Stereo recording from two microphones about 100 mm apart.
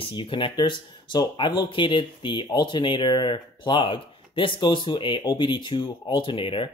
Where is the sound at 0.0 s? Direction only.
60° left (ahead or behind).